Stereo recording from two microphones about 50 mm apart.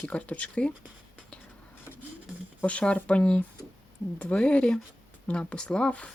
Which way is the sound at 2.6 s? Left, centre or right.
Left.